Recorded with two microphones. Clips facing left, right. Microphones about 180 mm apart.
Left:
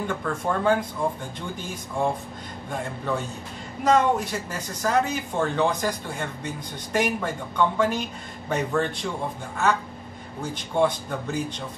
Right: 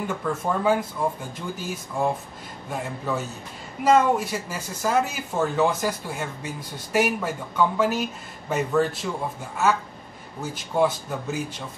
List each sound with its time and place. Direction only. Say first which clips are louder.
0.0 s speech: right 1 dB; 5° right (ahead or behind)
10.4 s speech: even; 5° right (ahead or behind)